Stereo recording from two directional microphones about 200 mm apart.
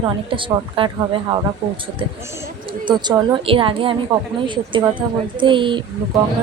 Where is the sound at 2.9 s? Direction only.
20° right (ahead or behind).